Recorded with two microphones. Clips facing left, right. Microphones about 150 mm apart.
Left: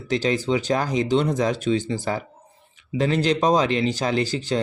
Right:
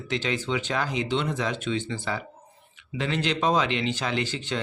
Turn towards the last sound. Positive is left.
turn(degrees=35)  # may be behind; listen again after turning